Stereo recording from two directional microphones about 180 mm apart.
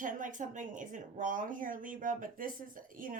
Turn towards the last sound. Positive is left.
turn(degrees=-50)  # may be behind; listen again after turning